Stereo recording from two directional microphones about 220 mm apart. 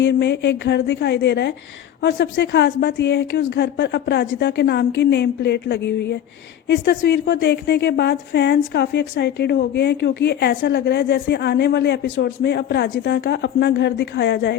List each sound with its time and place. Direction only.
0.0 s a woman's voice: 55° left (ahead or behind)